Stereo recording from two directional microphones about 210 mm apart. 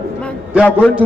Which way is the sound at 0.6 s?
5° left (ahead or behind).